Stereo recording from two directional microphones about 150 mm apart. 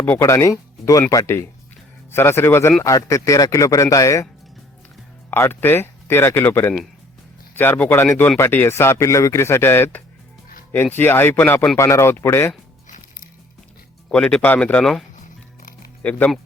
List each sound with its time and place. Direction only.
0.0 s speech: 15° left (ahead or behind)
5.3 s speech: 15° left (ahead or behind)
14.1 s speech: 5° left (ahead or behind)
16.0 s speech: 10° left (ahead or behind)